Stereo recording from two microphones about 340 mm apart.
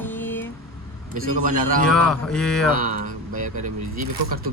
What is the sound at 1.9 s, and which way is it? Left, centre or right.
Speech, centre.